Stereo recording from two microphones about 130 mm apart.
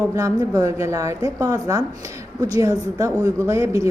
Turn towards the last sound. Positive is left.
turn(degrees=-25)  # may be behind; listen again after turning